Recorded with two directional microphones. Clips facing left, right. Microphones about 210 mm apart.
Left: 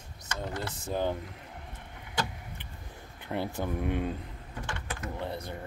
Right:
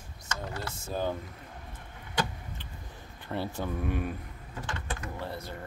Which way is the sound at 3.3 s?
15° left (ahead or behind).